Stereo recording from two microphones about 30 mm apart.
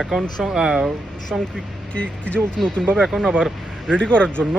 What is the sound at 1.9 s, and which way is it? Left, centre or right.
Speech, left.